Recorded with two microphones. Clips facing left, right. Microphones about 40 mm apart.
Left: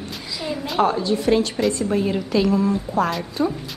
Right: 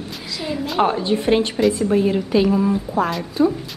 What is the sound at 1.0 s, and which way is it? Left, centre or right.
Speech, right.